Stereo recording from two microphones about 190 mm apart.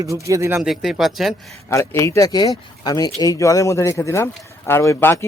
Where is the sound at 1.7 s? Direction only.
15° left (ahead or behind).